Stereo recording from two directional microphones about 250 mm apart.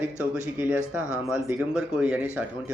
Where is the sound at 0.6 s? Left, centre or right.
Centre.